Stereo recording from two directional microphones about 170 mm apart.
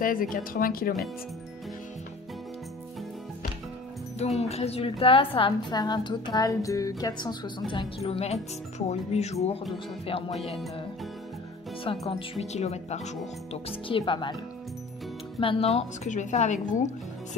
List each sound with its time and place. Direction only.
0.0 s speech: 55° left (ahead or behind)
4.4 s a woman's voice: 40° left (ahead or behind)
11.8 s a woman's voice: 30° left (ahead or behind)
15.4 s a woman's voice: 35° left (ahead or behind)